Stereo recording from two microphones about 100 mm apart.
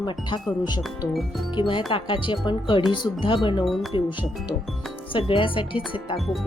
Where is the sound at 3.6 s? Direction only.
Centre (ahead or behind).